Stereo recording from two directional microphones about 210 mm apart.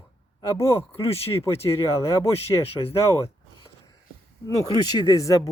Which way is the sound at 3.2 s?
15° left (ahead or behind).